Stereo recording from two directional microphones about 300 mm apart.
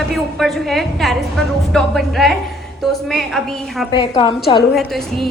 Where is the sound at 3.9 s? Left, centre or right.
Centre.